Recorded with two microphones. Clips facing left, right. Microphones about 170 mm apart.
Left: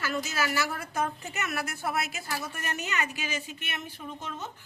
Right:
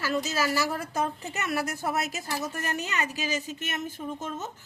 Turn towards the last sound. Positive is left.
turn(degrees=-45)  # may be behind; listen again after turning